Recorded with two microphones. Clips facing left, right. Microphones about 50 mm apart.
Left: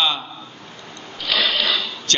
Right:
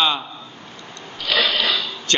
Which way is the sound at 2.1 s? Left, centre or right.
Right.